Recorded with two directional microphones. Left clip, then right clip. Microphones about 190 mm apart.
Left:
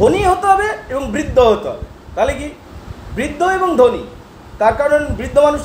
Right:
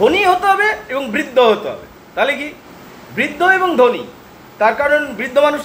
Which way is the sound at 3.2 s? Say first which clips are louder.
Right 2 dB; 5° left (ahead or behind).